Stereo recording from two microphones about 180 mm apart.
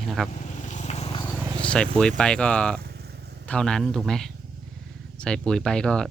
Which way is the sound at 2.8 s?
60° right (ahead or behind).